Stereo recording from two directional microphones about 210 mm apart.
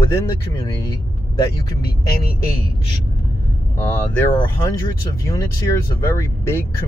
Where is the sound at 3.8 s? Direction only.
10° left (ahead or behind).